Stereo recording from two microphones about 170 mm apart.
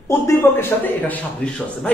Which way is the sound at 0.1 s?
15° left (ahead or behind).